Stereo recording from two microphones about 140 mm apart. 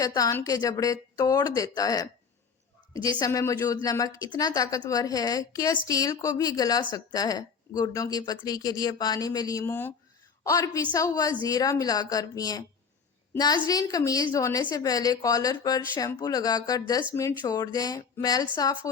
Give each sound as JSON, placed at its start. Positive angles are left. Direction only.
{"t": 0.0, "sound": "a woman's voice", "side_deg": 25}
{"t": 9.6, "sound": "a woman's voice", "side_deg": 15}
{"t": 13.7, "sound": "a woman's voice", "side_deg": 25}